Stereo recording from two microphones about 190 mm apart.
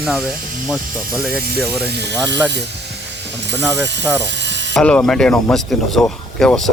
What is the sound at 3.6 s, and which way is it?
Speech, 5° right (ahead or behind).